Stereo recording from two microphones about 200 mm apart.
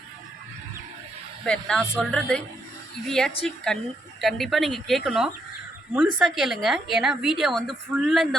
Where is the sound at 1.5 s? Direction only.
Centre (ahead or behind).